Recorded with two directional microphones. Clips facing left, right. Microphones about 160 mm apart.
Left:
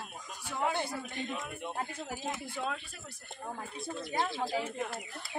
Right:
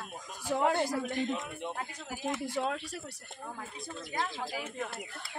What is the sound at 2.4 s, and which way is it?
Speech, 85° right.